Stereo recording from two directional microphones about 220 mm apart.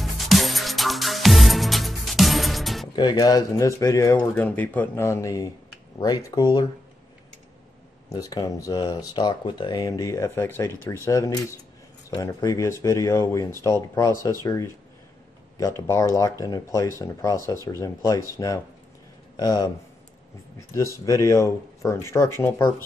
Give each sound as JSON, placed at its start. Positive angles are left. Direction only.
{"t": 0.0, "sound": "music", "side_deg": 0}
{"t": 3.0, "sound": "speech", "side_deg": 20}
{"t": 8.1, "sound": "speech", "side_deg": 15}